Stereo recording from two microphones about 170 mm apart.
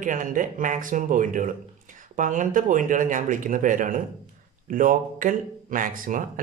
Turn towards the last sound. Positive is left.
turn(degrees=-55)  # may be behind; listen again after turning